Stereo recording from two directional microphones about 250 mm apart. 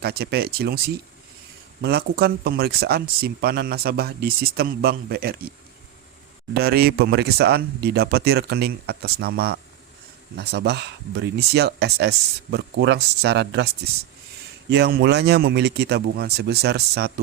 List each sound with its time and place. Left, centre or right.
0.0 s speech: right
14.7 s speech: right